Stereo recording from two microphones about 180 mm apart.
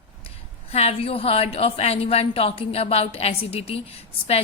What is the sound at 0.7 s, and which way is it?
A woman's voice, 35° left (ahead or behind).